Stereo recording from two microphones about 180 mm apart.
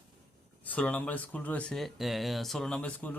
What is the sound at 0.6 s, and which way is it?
A man's voice, 10° left (ahead or behind).